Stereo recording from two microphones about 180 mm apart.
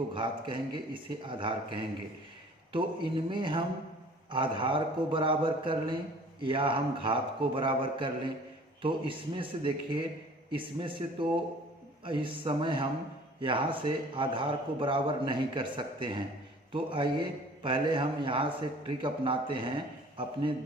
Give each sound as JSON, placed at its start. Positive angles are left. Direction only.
{"t": 0.1, "sound": "a man's voice", "side_deg": -25}